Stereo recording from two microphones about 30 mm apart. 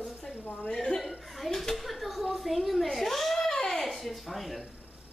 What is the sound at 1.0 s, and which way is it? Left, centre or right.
A child's voice, centre.